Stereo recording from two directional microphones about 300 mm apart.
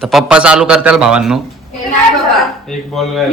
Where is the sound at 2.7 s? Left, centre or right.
Centre.